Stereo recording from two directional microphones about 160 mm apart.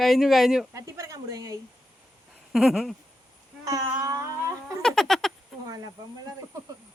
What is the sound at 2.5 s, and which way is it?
Speech, 5° right (ahead or behind).